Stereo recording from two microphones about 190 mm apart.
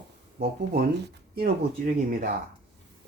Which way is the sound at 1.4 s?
45° right (ahead or behind).